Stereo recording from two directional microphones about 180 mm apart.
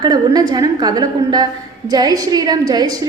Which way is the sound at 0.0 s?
20° right (ahead or behind).